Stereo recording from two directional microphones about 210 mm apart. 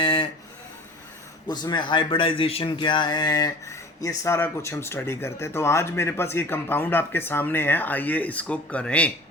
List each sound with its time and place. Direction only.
0.0 s speech: 25° left (ahead or behind)
1.5 s speech: 20° left (ahead or behind)